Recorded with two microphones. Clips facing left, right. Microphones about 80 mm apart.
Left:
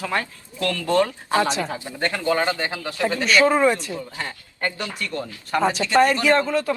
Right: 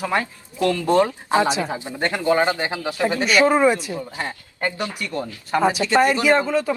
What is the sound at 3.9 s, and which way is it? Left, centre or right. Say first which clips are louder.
Speech: right 2 dB; right.